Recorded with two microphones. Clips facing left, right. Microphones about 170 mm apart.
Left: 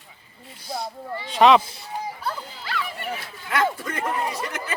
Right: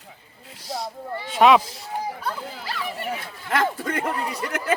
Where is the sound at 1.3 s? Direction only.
5° right (ahead or behind).